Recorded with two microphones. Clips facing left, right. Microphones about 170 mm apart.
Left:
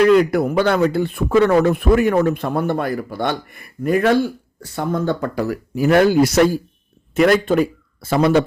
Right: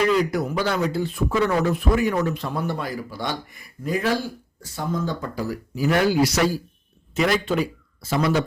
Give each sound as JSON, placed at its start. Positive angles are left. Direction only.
{"t": 0.1, "sound": "speech", "side_deg": 60}